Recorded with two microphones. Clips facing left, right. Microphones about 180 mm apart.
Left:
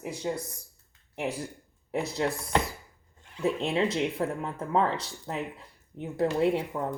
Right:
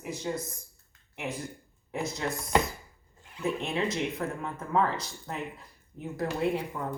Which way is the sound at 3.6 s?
30° left (ahead or behind).